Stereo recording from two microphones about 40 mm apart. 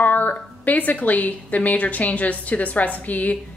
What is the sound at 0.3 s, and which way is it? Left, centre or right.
A woman's voice, left.